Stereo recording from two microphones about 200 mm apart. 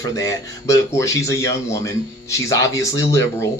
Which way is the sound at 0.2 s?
15° left (ahead or behind).